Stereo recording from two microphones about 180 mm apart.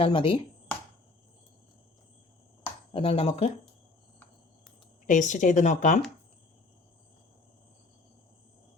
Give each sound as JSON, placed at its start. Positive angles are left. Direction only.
{"t": 0.0, "sound": "speech", "side_deg": 30}
{"t": 2.9, "sound": "speech", "side_deg": 30}
{"t": 5.0, "sound": "speech", "side_deg": 45}